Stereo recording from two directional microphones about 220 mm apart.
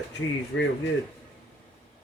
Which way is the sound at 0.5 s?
60° left (ahead or behind).